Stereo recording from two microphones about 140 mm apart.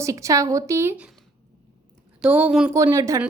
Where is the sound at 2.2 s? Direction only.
10° right (ahead or behind).